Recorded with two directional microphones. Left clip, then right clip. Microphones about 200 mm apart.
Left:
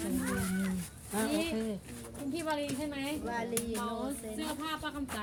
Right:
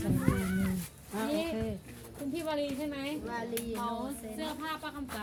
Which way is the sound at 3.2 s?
10° left (ahead or behind).